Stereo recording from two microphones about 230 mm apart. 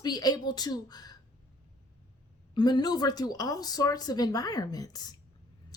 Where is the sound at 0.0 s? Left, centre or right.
Centre.